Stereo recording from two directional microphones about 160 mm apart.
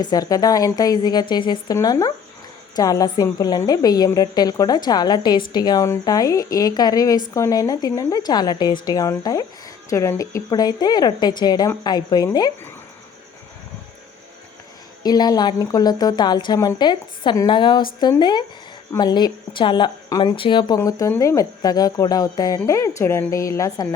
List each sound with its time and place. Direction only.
0.0 s a woman's voice: 25° left (ahead or behind)
15.0 s a woman's voice: 25° left (ahead or behind)